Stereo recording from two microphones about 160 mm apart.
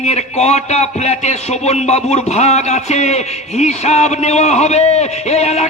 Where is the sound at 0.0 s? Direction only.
45° left (ahead or behind).